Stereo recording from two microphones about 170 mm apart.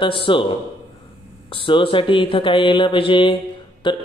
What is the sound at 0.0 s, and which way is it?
Speech, 30° left (ahead or behind).